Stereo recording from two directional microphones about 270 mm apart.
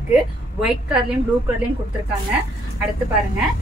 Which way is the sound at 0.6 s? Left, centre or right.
Centre.